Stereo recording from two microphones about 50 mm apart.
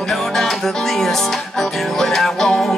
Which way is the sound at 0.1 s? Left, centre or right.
Centre.